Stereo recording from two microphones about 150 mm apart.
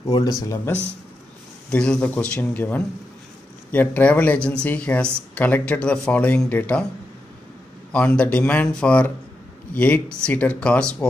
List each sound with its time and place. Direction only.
0.4 s speech: 20° left (ahead or behind)
1.7 s speech: 5° left (ahead or behind)
7.9 s speech: 10° left (ahead or behind)